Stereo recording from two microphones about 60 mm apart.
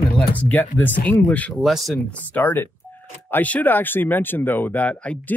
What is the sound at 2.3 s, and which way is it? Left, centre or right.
Speech, left.